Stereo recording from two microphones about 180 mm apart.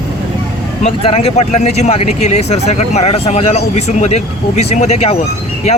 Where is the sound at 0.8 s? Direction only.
35° left (ahead or behind).